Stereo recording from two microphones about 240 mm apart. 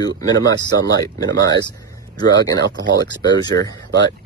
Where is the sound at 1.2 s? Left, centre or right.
Right.